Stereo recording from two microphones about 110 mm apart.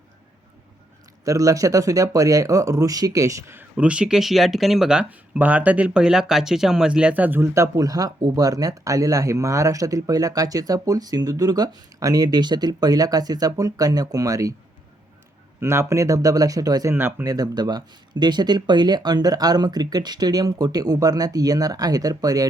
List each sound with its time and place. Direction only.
1.2 s speech: 30° right (ahead or behind)
15.6 s speech: 25° right (ahead or behind)
16.9 s speech: 20° right (ahead or behind)
17.2 s speech: 35° right (ahead or behind)